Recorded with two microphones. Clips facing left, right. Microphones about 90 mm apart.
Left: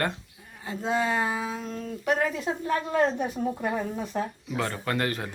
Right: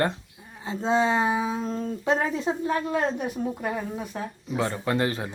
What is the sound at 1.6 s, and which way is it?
Speech, 35° right (ahead or behind).